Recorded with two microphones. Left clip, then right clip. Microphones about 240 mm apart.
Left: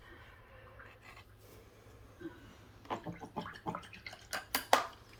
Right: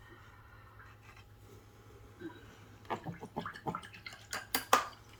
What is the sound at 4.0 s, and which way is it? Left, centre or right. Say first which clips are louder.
Dishes: even; right.